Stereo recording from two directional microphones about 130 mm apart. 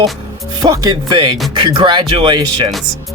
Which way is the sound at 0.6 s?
30° right (ahead or behind).